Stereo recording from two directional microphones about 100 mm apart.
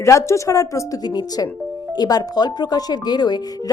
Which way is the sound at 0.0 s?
30° left (ahead or behind).